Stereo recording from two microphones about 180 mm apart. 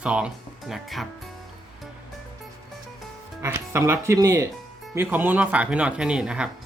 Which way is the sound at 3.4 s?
15° right (ahead or behind).